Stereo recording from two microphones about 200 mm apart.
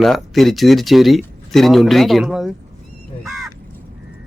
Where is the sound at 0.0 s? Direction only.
Centre (ahead or behind).